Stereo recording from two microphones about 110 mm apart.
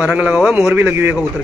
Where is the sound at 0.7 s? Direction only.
20° right (ahead or behind).